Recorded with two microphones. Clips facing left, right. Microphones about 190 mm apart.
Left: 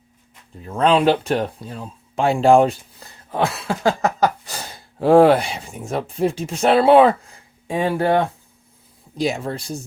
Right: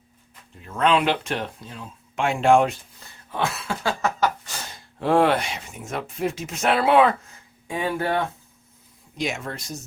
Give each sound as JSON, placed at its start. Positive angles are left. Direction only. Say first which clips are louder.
{"t": 0.6, "sound": "speech", "louder": "left 5 dB", "side_deg": 35}
{"t": 3.3, "sound": "cough", "louder": "left 5 dB", "side_deg": 35}
{"t": 4.9, "sound": "speech", "louder": "left 7 dB", "side_deg": 35}